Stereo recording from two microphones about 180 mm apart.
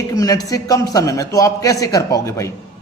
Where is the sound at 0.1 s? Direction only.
20° left (ahead or behind).